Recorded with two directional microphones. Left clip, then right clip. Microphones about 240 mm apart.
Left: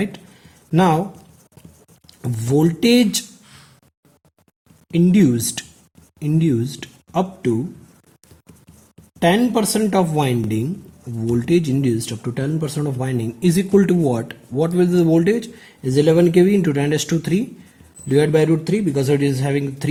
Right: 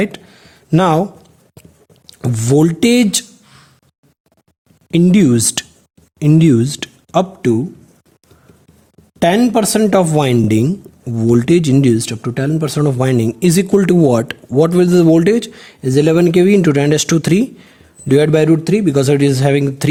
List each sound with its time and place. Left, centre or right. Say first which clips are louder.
0.7 s speech: right 4 dB; right
2.0 s speech: right 7 dB; right
4.9 s speech: right 5 dB; right
9.1 s speech: right 4 dB; right